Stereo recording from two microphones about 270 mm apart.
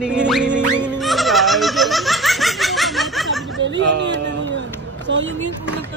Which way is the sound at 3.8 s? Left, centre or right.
Right.